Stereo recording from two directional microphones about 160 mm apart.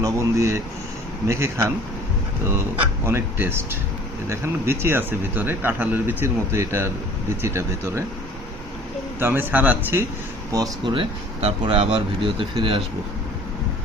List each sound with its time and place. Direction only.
0.0 s speech: 20° right (ahead or behind)
3.1 s speech: 15° right (ahead or behind)
9.2 s speech: 10° right (ahead or behind)
10.9 s speech: 40° right (ahead or behind)